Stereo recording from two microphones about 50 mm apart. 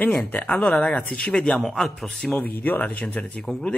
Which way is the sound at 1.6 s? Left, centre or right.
Centre.